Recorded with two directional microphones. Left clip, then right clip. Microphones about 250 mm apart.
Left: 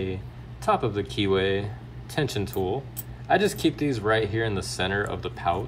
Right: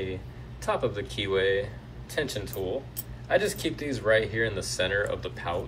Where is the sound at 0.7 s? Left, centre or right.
Centre.